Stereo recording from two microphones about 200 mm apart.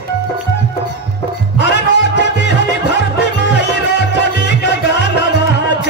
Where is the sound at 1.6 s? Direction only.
60° left (ahead or behind).